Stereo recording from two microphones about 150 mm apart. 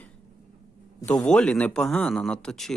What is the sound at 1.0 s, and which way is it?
Speech, 10° left (ahead or behind).